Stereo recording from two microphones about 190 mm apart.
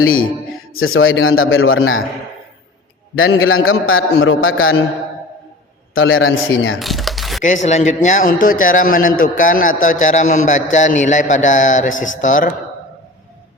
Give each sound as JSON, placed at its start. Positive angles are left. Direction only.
{"t": 0.7, "sound": "a man's voice", "side_deg": 90}
{"t": 3.2, "sound": "a man's voice", "side_deg": 90}
{"t": 5.9, "sound": "a man's voice", "side_deg": 90}
{"t": 6.7, "sound": "a sound", "side_deg": 0}
{"t": 7.4, "sound": "a man's voice", "side_deg": 40}